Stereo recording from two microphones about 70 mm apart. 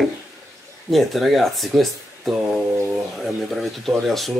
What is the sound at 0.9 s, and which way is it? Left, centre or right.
Speech, centre.